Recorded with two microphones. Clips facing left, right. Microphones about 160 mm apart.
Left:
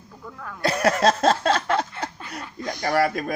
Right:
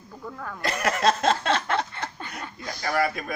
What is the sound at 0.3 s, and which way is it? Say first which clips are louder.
Speech: right 2 dB; 5° right (ahead or behind).